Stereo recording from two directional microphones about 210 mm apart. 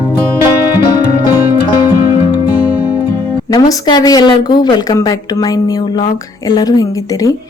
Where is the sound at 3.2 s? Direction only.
15° left (ahead or behind).